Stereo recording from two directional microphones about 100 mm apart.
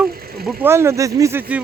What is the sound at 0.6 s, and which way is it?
Speech, 25° right (ahead or behind).